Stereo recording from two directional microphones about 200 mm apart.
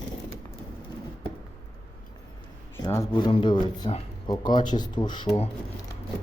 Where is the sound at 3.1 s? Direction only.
25° left (ahead or behind).